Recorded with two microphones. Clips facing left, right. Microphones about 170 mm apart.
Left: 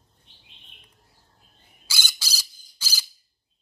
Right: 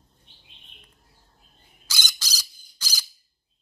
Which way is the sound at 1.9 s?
10° left (ahead or behind).